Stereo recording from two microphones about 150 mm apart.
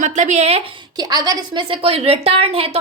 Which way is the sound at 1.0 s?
25° right (ahead or behind).